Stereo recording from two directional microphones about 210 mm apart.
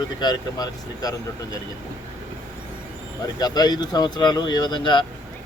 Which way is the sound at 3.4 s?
20° left (ahead or behind).